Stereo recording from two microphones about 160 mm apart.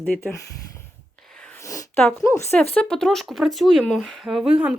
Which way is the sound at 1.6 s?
20° left (ahead or behind).